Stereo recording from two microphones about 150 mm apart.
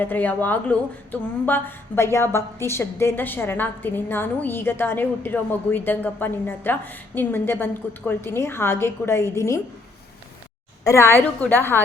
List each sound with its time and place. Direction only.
0.0 s speech: 10° left (ahead or behind)
10.8 s speech: 15° left (ahead or behind)